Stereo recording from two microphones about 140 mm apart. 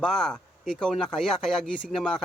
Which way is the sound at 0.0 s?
Centre (ahead or behind).